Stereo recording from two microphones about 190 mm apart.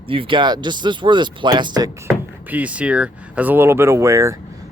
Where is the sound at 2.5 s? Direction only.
5° right (ahead or behind).